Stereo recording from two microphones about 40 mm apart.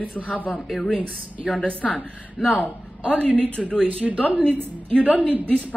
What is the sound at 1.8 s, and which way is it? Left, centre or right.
Speech, centre.